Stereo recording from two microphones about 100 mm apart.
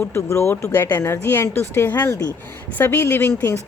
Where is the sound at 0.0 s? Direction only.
25° left (ahead or behind).